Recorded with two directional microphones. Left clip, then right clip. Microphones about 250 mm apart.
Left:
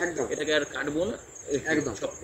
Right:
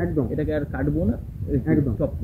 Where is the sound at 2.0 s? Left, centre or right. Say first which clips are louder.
Right 7 dB; left.